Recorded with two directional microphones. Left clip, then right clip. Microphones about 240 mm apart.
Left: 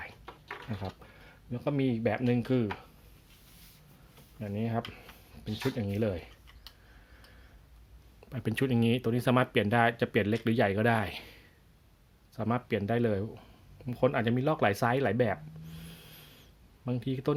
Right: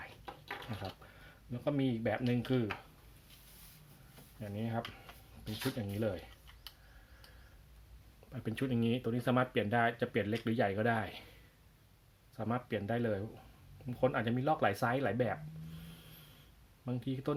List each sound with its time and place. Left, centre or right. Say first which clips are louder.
1.5 s speech: left 4 dB; left
4.4 s speech: left 5 dB; left
8.3 s speech: left 7 dB; left
12.4 s speech: left 6 dB; left